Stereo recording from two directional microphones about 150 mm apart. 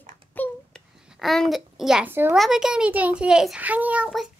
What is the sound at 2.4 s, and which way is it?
A woman's voice, 5° right (ahead or behind).